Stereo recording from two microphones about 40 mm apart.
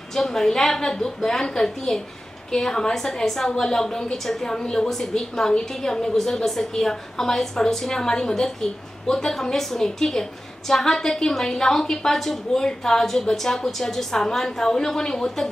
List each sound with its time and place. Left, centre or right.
0.1 s a woman's voice: centre